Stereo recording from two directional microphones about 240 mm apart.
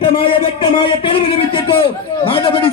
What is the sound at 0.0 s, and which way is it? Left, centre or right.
A man's voice, left.